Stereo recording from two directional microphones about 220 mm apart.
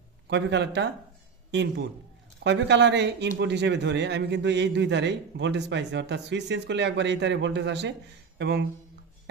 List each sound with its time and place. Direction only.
0.3 s a man's voice: 50° right (ahead or behind)